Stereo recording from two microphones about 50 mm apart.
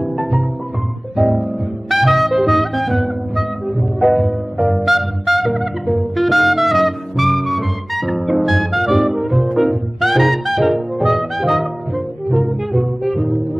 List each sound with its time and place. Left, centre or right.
0.0 s music: centre